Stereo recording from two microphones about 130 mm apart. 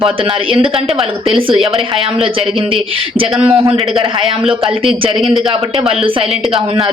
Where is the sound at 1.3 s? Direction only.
45° right (ahead or behind).